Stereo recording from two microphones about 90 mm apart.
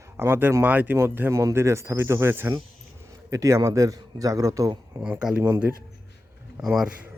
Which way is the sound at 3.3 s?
40° right (ahead or behind).